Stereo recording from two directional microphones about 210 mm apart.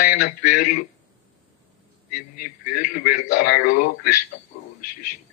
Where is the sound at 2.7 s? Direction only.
40° left (ahead or behind).